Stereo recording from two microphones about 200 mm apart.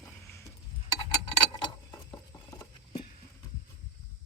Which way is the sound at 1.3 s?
20° left (ahead or behind).